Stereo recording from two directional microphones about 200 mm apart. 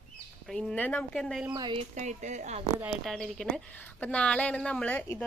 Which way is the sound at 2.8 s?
Centre (ahead or behind).